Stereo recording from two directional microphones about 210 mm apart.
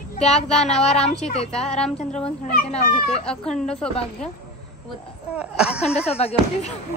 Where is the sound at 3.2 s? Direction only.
5° left (ahead or behind).